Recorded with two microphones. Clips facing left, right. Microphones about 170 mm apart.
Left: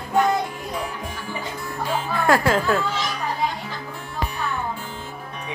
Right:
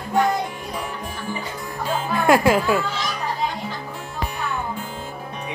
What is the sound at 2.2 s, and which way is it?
Speech, 15° right (ahead or behind).